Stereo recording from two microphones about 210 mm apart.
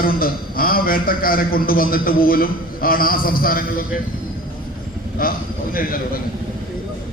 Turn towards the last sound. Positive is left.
turn(degrees=45)  # may be behind; listen again after turning